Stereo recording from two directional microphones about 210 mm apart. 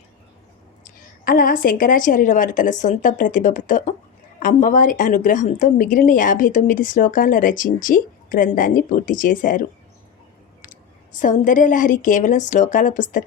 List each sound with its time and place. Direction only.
0.9 s a woman's voice: 45° left (ahead or behind)